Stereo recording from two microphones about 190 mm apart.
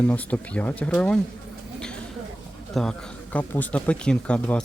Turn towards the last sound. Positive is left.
turn(degrees=5)  # may be behind; listen again after turning